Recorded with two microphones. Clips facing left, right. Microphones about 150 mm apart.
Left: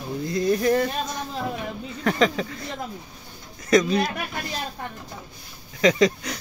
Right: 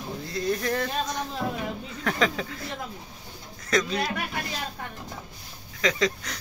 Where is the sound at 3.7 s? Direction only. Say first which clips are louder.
Left 7 dB; 15° left (ahead or behind).